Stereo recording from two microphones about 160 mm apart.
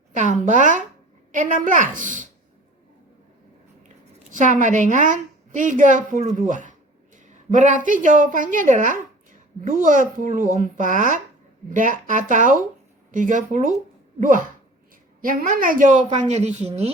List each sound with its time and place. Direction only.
0.2 s a woman's voice: 50° right (ahead or behind)
4.3 s a woman's voice: 55° right (ahead or behind)